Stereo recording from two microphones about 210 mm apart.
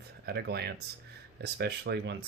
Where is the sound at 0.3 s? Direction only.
50° right (ahead or behind).